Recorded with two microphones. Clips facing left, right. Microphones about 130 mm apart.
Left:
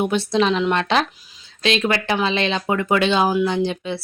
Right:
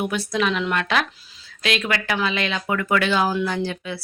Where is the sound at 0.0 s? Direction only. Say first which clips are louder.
Left 4 dB; 25° left (ahead or behind).